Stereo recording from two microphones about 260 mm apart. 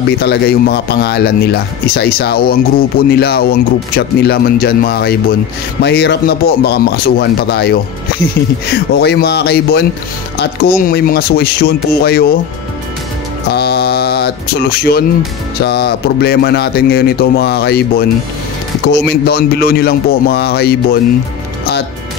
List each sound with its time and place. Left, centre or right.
0.2 s a man's voice: left
13.5 s music: left
15.6 s a man's voice: left